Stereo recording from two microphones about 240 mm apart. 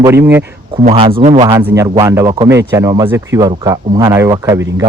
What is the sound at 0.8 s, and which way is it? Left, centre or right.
Speech, right.